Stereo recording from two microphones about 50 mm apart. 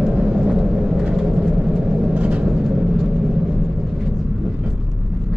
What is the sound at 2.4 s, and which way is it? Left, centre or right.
Vehicle, centre.